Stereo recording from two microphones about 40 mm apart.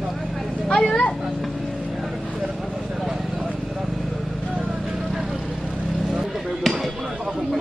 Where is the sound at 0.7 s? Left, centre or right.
Centre.